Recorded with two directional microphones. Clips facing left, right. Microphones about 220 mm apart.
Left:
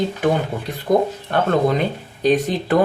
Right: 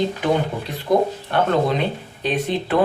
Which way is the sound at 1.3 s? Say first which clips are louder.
Left 2 dB; 45° left (ahead or behind).